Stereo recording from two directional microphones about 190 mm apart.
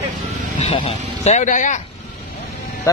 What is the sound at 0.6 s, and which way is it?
Speech, 30° left (ahead or behind).